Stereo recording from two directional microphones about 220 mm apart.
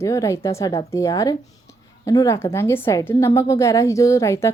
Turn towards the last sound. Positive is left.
turn(degrees=10)  # may be behind; listen again after turning